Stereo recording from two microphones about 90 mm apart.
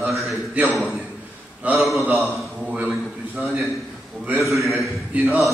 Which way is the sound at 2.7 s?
15° right (ahead or behind).